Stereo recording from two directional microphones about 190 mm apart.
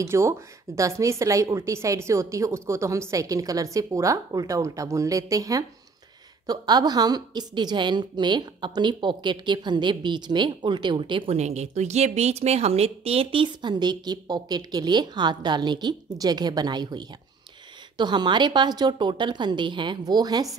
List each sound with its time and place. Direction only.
0.0 s a woman's voice: 15° right (ahead or behind)